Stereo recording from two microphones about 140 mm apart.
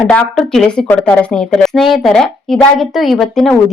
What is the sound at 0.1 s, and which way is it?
Speech, 5° left (ahead or behind).